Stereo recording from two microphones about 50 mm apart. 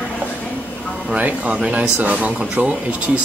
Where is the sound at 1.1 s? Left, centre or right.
Right.